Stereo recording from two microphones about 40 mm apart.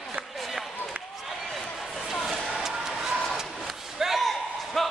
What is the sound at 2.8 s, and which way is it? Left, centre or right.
Vehicle, centre.